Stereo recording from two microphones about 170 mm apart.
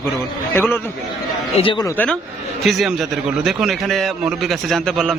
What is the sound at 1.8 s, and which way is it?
A man's voice, 10° left (ahead or behind).